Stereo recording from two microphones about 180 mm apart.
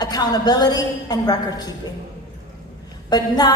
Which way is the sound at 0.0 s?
20° left (ahead or behind).